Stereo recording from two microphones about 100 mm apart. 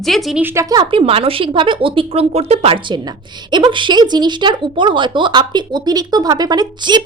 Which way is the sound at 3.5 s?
50° right (ahead or behind).